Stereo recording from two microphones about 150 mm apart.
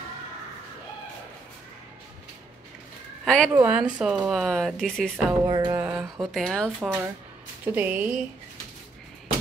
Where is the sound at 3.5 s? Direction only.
10° right (ahead or behind); by 5.3 s 5° left (ahead or behind).